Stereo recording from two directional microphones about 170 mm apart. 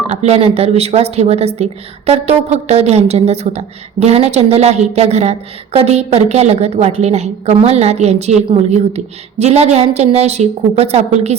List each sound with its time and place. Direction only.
0.1 s a woman's voice: 40° right (ahead or behind)
9.4 s a woman's voice: 40° right (ahead or behind)